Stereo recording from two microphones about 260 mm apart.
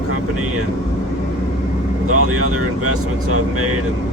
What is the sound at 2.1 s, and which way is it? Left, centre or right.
Speech, right.